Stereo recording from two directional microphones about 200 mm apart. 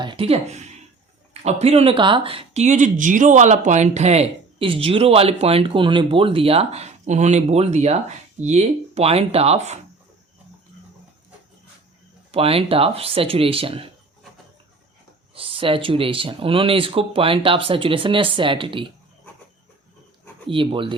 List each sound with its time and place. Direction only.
0.0 s speech: 25° right (ahead or behind)
12.3 s speech: 30° right (ahead or behind)
15.4 s speech: 25° right (ahead or behind)
20.5 s speech: 25° right (ahead or behind)